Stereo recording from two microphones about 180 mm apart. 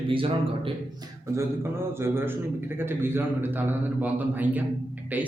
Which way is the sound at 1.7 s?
15° right (ahead or behind).